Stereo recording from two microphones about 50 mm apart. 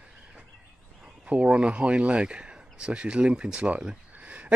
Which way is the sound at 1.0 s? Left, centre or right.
Right.